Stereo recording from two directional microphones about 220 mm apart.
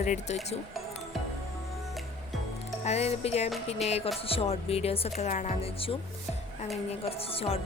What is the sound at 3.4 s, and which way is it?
Music, centre (ahead or behind).